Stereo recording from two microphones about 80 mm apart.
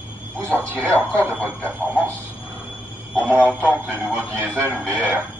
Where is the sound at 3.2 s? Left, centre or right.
Right.